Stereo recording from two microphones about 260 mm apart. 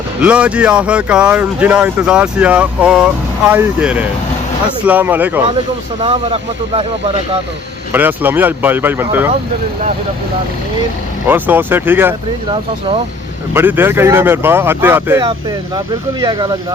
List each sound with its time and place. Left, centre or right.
0.2 s speech: centre
6.0 s speech: right
7.9 s speech: centre
11.3 s speech: centre